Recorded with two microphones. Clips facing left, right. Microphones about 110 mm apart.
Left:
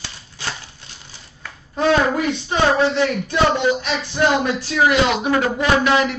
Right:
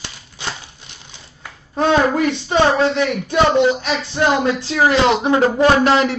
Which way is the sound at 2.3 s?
25° right (ahead or behind).